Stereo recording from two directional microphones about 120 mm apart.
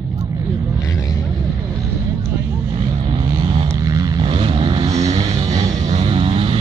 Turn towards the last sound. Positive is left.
turn(degrees=-50)  # may be behind; listen again after turning